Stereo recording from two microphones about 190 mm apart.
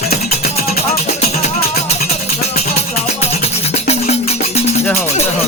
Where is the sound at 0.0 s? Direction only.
55° left (ahead or behind).